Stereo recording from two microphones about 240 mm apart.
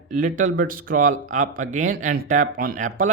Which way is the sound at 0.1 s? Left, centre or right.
Right.